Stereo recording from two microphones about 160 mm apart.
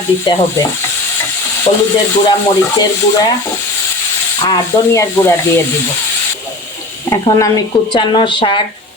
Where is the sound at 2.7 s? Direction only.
25° left (ahead or behind).